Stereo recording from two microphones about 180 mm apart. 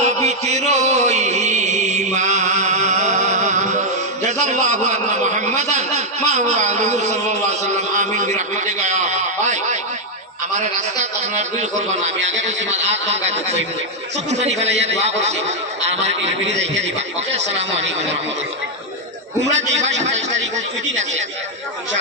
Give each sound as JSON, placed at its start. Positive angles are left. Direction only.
{"t": 0.0, "sound": "music", "side_deg": -40}
{"t": 10.6, "sound": "a man's voice", "side_deg": -40}
{"t": 16.5, "sound": "a man's voice", "side_deg": -80}
{"t": 17.3, "sound": "a man's voice", "side_deg": -40}
{"t": 19.5, "sound": "a man's voice", "side_deg": -40}